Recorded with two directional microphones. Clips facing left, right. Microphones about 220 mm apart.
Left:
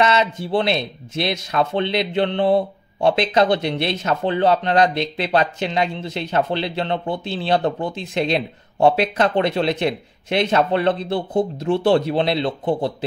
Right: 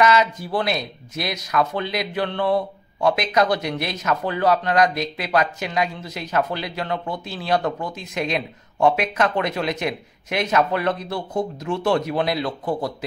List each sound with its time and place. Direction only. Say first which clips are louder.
0.0 s speech: even; 25° left (ahead or behind)